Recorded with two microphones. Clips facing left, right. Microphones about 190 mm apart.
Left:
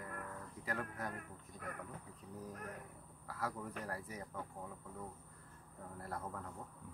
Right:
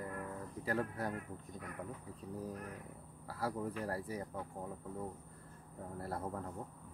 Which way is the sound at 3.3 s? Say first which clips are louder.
Right 4 dB; 30° right (ahead or behind).